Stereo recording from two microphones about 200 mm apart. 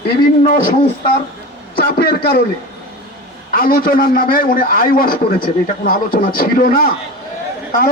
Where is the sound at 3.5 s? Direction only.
45° left (ahead or behind).